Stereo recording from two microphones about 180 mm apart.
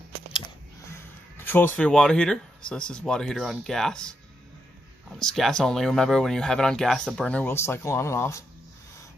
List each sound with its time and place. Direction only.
0.9 s speech: 10° left (ahead or behind)
5.1 s speech: centre (ahead or behind); by 8.5 s 15° left (ahead or behind)